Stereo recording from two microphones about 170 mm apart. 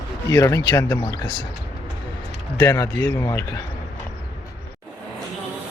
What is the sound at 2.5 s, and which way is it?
Speech, 15° left (ahead or behind).